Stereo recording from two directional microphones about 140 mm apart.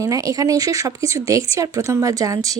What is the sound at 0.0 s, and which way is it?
Speech, 25° right (ahead or behind).